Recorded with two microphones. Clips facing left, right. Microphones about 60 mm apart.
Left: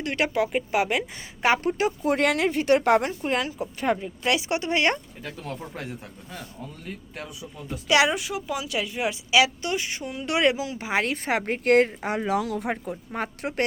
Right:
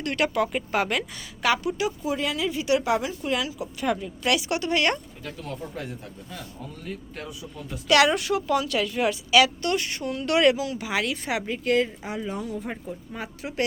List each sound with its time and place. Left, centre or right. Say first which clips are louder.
0.0 s speech: even; centre
1.6 s speech: left 3 dB; left
2.1 s a woman's voice: left 5 dB; left
3.2 s speech: left 1 dB; left
3.9 s speech: even; left
7.2 s speech: right 1 dB; centre
8.1 s a woman's voice: right 5 dB; centre; by 13.7 s left